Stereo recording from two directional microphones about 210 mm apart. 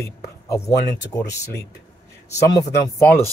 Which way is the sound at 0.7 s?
15° left (ahead or behind).